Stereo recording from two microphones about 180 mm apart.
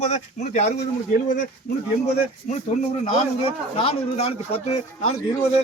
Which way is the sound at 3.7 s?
35° left (ahead or behind).